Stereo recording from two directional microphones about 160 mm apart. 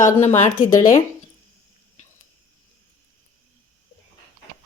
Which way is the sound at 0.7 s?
55° left (ahead or behind).